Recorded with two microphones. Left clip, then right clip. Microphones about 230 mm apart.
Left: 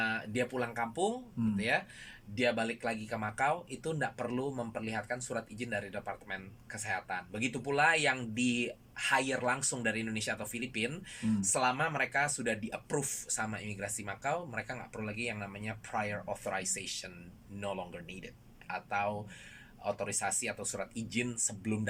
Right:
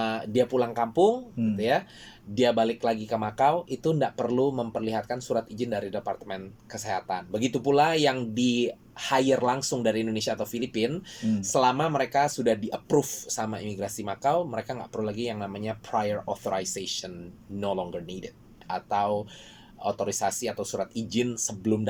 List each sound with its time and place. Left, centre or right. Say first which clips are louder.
0.0 s speech: right 8 dB; right
19.9 s speech: right 7 dB; right